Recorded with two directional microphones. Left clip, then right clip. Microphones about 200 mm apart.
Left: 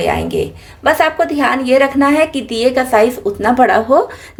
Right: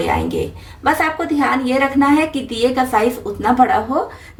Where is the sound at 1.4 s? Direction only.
45° left (ahead or behind).